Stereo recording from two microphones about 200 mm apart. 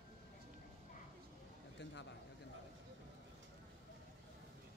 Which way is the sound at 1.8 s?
65° left (ahead or behind).